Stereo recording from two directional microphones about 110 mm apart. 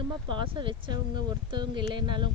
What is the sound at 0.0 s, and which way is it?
Speech, 45° right (ahead or behind).